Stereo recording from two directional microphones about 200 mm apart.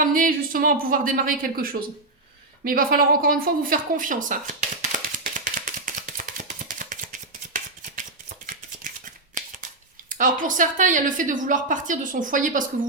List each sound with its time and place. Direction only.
0.0 s a woman's voice: 45° right (ahead or behind)
4.8 s chopping: 40° right (ahead or behind)
8.9 s scissors: 40° right (ahead or behind)
9.3 s a sound: 40° right (ahead or behind)
10.1 s a woman's voice: 40° right (ahead or behind)